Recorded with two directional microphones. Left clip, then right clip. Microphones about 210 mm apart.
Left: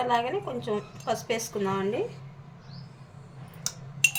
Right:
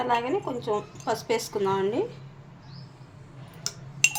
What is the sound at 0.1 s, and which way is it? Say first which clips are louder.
A woman's voice: right 1 dB; 20° right (ahead or behind).